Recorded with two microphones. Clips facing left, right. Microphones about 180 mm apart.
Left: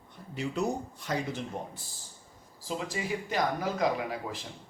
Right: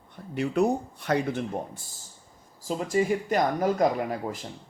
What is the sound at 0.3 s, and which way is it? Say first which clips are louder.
Speech: right 7 dB; 60° right (ahead or behind).